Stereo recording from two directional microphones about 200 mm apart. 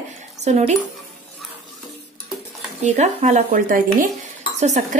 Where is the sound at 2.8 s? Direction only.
35° right (ahead or behind).